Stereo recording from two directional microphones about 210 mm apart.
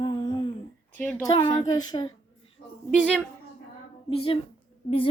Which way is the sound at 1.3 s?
20° left (ahead or behind).